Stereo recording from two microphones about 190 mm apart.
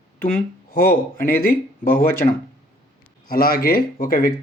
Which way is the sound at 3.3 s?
50° left (ahead or behind).